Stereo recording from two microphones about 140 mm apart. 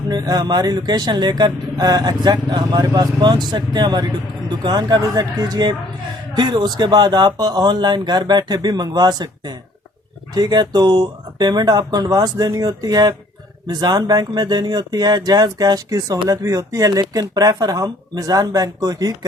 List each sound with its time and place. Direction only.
0.1 s speech: 30° right (ahead or behind)